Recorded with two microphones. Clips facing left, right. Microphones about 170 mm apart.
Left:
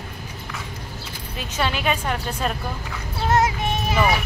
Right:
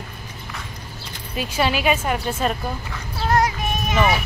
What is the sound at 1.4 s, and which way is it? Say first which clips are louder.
Speech: right 4 dB; 10° right (ahead or behind).